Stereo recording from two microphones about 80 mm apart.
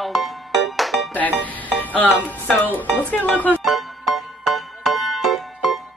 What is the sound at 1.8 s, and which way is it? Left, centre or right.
Music, left.